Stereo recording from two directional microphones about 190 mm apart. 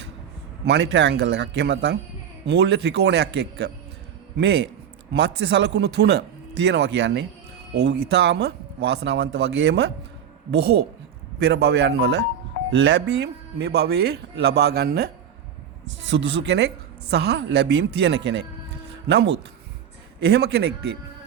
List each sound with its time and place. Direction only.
0.6 s speech: 65° right (ahead or behind)
16.0 s speech: 70° right (ahead or behind)